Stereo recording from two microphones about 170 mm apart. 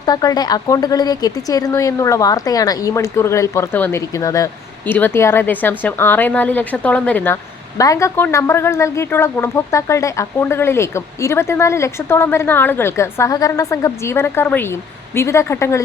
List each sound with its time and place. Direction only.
0.0 s a woman's voice: 25° left (ahead or behind)